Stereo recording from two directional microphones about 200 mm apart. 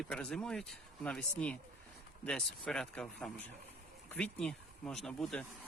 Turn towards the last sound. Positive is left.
turn(degrees=0)  # may be behind; listen again after turning